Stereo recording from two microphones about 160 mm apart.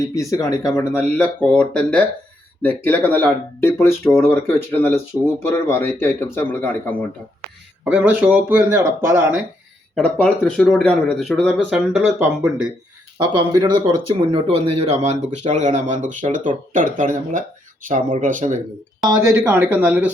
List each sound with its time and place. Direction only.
0.1 s speech: 20° left (ahead or behind)
7.9 s speech: 10° right (ahead or behind)
9.9 s speech: 5° left (ahead or behind)
13.1 s speech: 25° right (ahead or behind)
14.1 s speech: 40° right (ahead or behind)
19.0 s speech: 20° right (ahead or behind)